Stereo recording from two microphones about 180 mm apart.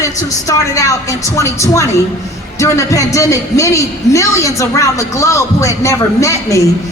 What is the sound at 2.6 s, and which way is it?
A man's voice, 15° left (ahead or behind).